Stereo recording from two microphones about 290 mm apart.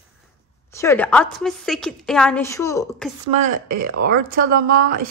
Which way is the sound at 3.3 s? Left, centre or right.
Right.